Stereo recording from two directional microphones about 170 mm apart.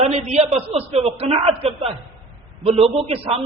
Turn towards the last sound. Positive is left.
turn(degrees=-35)  # may be behind; listen again after turning